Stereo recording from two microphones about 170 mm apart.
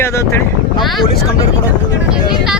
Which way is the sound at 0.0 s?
15° left (ahead or behind).